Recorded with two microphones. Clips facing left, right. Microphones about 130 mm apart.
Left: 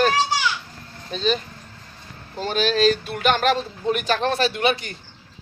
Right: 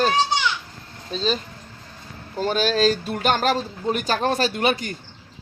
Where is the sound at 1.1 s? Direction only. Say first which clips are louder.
Left 1 dB; 35° right (ahead or behind).